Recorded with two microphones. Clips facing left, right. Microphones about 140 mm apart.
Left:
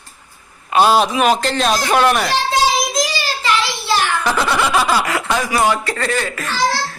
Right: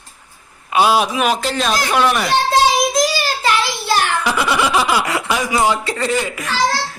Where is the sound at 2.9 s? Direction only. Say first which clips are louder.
Right 3 dB; 50° right (ahead or behind).